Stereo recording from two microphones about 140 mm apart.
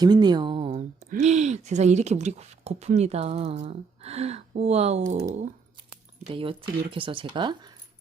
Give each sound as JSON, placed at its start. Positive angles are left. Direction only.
{"t": 0.0, "sound": "a sound", "side_deg": -30}
{"t": 1.2, "sound": "speech", "side_deg": -55}
{"t": 6.2, "sound": "speech", "side_deg": -40}